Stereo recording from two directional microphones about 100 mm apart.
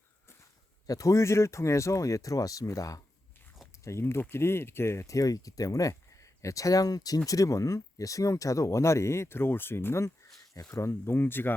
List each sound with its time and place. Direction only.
0.9 s speech: 35° left (ahead or behind)